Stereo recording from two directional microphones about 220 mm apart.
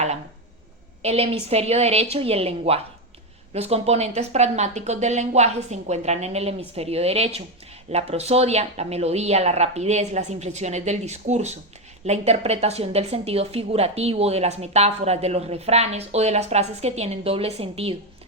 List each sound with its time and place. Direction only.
1.0 s a woman's voice: 25° right (ahead or behind)